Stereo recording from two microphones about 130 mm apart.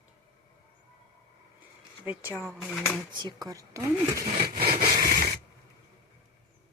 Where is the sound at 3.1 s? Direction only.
35° right (ahead or behind).